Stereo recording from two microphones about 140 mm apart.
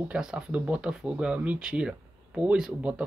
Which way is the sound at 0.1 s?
5° right (ahead or behind).